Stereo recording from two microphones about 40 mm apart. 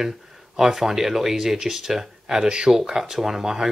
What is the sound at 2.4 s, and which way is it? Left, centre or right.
Speech, right.